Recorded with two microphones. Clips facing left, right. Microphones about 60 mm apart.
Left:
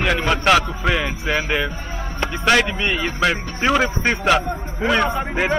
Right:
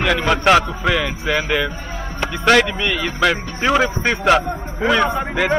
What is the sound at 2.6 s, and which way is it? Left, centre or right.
Speech, left.